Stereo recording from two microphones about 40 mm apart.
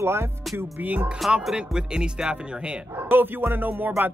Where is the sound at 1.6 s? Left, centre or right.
Centre.